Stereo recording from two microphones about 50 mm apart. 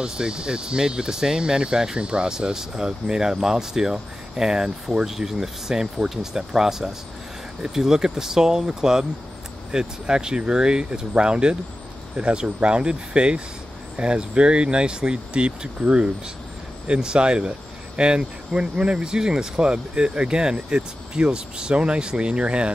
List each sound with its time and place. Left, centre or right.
0.0 s speech: centre